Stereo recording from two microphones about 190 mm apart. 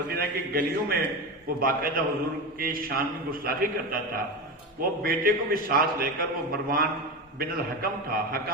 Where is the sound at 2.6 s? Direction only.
50° right (ahead or behind).